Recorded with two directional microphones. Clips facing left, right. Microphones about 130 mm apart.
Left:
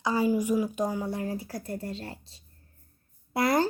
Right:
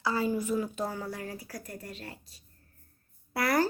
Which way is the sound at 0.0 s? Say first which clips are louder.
Left 4 dB; 15° left (ahead or behind).